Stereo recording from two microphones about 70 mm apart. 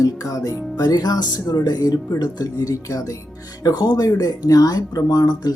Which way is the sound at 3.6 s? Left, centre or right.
Left.